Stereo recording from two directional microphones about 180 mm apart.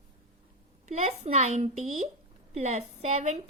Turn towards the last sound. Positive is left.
turn(degrees=-40)  # may be behind; listen again after turning